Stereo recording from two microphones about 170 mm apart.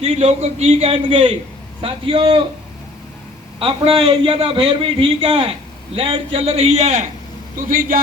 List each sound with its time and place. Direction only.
0.0 s a man's voice: 40° right (ahead or behind)
3.6 s a man's voice: 30° right (ahead or behind)
7.7 s speech: 55° right (ahead or behind)